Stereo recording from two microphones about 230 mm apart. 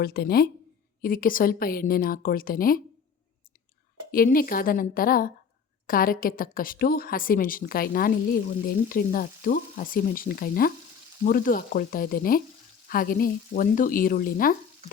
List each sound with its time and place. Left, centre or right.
0.0 s a woman's voice: left
4.1 s a woman's voice: left